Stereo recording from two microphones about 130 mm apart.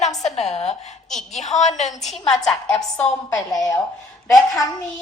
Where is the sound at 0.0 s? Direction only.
60° left (ahead or behind).